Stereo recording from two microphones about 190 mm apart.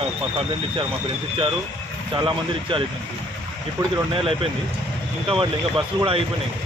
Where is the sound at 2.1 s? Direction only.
25° right (ahead or behind).